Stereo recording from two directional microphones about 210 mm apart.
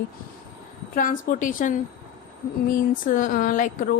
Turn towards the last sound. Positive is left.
turn(degrees=40)  # may be behind; listen again after turning